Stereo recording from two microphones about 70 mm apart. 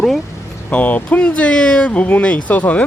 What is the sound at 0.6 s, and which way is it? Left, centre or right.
Speech, centre.